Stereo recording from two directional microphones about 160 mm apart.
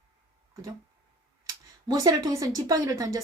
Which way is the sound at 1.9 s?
25° right (ahead or behind).